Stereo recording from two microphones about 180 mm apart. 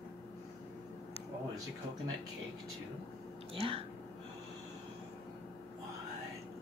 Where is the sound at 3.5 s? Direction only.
30° right (ahead or behind).